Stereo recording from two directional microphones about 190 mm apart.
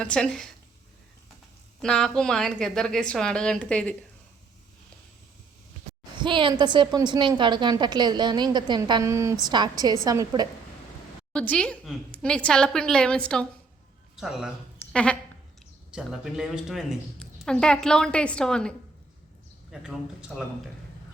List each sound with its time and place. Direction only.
0.0 s a woman's voice: 5° left (ahead or behind)
1.8 s a woman's voice: 5° left (ahead or behind)
6.1 s a woman's voice: 25° right (ahead or behind)
11.3 s a woman's voice: 5° left (ahead or behind)
19.7 s a woman's voice: 5° right (ahead or behind)